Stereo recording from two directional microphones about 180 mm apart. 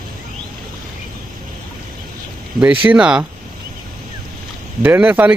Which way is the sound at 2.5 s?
10° right (ahead or behind).